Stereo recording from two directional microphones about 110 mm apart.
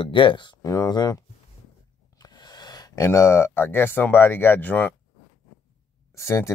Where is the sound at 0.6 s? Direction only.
30° left (ahead or behind).